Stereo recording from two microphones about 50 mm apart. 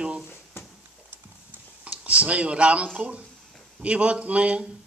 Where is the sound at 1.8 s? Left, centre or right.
Right.